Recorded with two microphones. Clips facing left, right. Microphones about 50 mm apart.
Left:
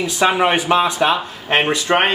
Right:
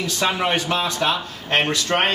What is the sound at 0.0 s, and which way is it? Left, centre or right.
Speech, centre.